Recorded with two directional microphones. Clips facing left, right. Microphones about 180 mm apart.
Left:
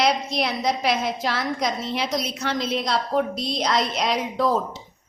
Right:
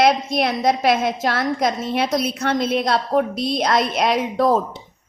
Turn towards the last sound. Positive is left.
turn(degrees=-55)  # may be behind; listen again after turning